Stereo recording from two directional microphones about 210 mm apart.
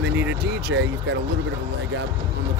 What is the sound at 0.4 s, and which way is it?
Speech, 50° right (ahead or behind).